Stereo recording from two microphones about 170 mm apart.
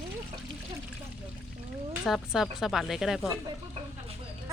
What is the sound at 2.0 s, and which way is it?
Speech, centre (ahead or behind).